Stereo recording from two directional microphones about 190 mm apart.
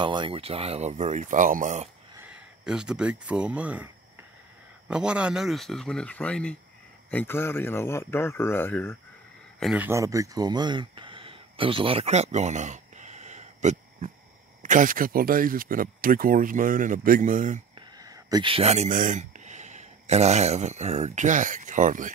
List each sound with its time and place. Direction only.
0.0 s speech: 25° right (ahead or behind); by 1.9 s 40° right (ahead or behind)
2.1 s speech: 5° right (ahead or behind); by 8.9 s 10° left (ahead or behind)
9.6 s speech: centre (ahead or behind)
9.8 s speech: 15° right (ahead or behind); by 17.6 s 40° right (ahead or behind)
17.7 s speech: 20° right (ahead or behind); by 22.1 s 45° right (ahead or behind)